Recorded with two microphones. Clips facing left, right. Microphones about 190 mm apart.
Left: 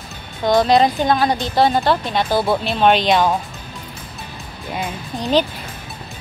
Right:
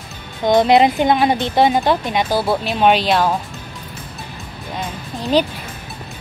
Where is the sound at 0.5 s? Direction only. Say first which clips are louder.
Right 2 dB; 20° right (ahead or behind); by 3.3 s 5° right (ahead or behind).